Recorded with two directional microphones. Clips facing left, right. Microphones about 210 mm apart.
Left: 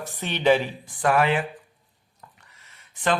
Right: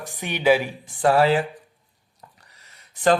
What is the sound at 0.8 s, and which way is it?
Speech, 30° right (ahead or behind).